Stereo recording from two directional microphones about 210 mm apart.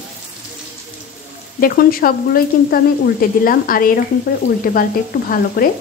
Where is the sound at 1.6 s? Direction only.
45° left (ahead or behind).